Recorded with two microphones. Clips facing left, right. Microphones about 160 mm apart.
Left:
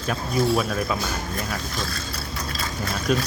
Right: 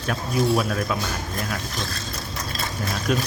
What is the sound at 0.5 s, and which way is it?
Speech, centre (ahead or behind).